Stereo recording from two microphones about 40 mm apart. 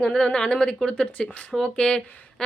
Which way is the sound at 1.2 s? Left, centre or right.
Left.